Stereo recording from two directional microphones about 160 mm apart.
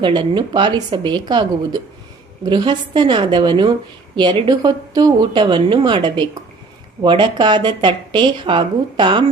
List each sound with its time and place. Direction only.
0.0 s speech: 30° right (ahead or behind)